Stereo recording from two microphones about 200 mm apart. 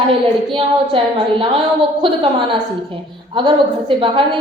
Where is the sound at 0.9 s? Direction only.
25° right (ahead or behind).